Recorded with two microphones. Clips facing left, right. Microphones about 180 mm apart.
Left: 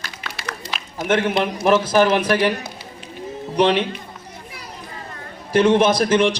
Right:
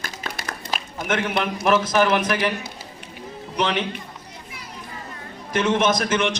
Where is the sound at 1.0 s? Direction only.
30° left (ahead or behind).